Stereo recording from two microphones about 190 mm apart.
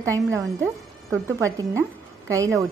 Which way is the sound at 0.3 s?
15° right (ahead or behind).